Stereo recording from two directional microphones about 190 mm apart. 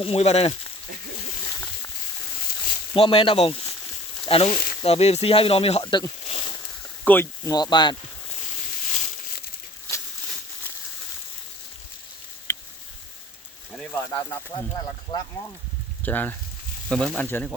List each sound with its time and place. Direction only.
0.0 s speech: 30° left (ahead or behind)
2.9 s speech: 30° left (ahead or behind)
7.0 s speech: 10° left (ahead or behind)
12.5 s a sound: 10° left (ahead or behind)
13.9 s speech: 10° left (ahead or behind)
16.0 s speech: 10° left (ahead or behind)